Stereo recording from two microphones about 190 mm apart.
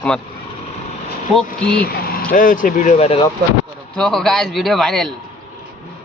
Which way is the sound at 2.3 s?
45° left (ahead or behind).